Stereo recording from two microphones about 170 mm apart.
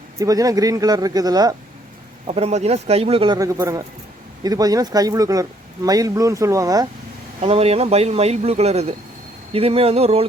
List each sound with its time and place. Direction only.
0.2 s speech: 20° right (ahead or behind)
2.2 s speech: 35° right (ahead or behind)
3.3 s speech: 20° right (ahead or behind)
7.4 s speech: 35° right (ahead or behind)